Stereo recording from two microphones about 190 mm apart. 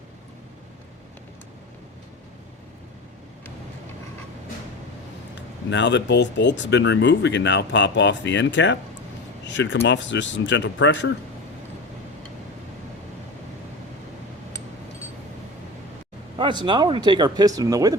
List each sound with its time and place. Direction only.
5.3 s speech: 70° left (ahead or behind)
16.6 s speech: 25° right (ahead or behind)